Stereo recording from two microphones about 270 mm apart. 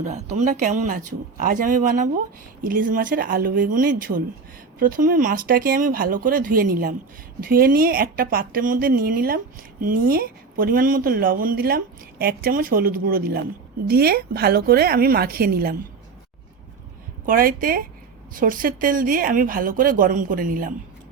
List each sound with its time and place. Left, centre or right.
0.0 s speech: right
17.2 s speech: right